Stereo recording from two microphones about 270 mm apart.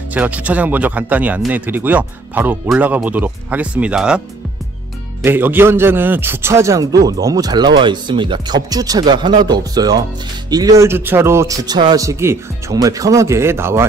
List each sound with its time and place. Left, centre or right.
0.1 s speech: centre
5.2 s a man's voice: centre